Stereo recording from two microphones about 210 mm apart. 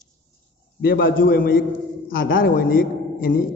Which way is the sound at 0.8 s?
45° left (ahead or behind).